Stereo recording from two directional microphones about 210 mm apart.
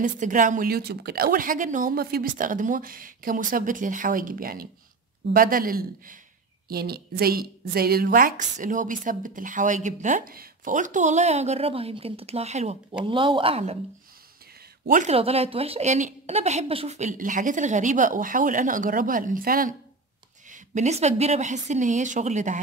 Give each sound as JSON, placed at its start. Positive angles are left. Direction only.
{"t": 0.0, "sound": "a woman's voice", "side_deg": -40}
{"t": 14.9, "sound": "a woman's voice", "side_deg": -35}